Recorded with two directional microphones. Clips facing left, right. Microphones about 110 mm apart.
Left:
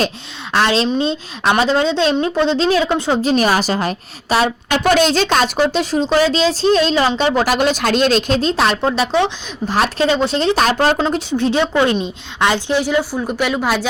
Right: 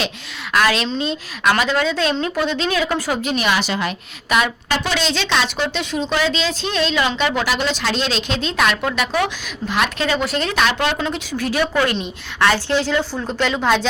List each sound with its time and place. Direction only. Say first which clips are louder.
0.5 s a woman's voice: left 3 dB; 30° left (ahead or behind)
4.8 s speech: left 12 dB; 50° left (ahead or behind)
11.3 s a woman's voice: left 4 dB; 25° left (ahead or behind); by 13.8 s 5° left (ahead or behind)